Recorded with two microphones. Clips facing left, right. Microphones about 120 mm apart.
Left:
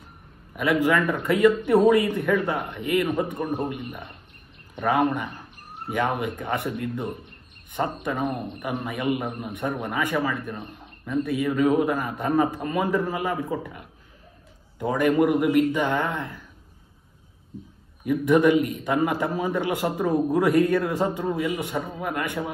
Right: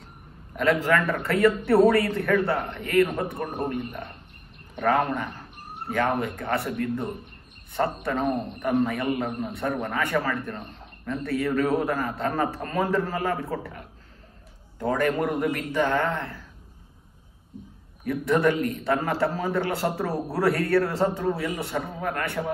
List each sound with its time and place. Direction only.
0.6 s a man's voice: 15° left (ahead or behind)
18.0 s a man's voice: 15° left (ahead or behind)